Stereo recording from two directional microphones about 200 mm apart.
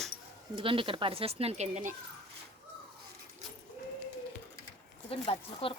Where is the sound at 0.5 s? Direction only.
25° right (ahead or behind).